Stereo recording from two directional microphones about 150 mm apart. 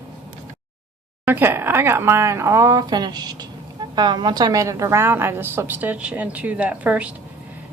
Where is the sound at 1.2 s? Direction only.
15° right (ahead or behind).